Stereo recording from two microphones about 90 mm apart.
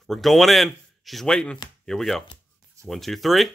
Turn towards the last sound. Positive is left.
turn(degrees=0)  # may be behind; listen again after turning